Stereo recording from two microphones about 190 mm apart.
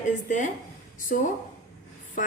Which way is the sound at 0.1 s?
40° left (ahead or behind).